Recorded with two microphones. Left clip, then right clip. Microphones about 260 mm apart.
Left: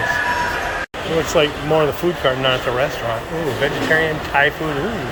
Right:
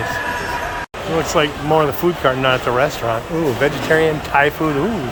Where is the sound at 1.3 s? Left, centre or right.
Centre.